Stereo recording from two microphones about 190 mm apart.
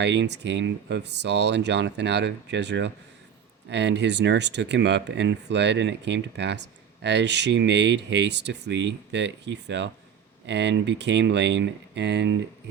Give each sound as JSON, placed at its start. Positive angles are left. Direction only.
{"t": 0.0, "sound": "speech", "side_deg": -65}